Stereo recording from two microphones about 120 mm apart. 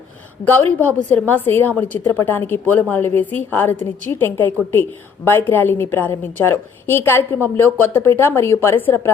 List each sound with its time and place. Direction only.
0.4 s a woman's voice: 15° left (ahead or behind)